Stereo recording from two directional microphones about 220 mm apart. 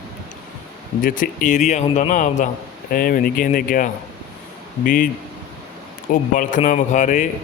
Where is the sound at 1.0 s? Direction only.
40° left (ahead or behind).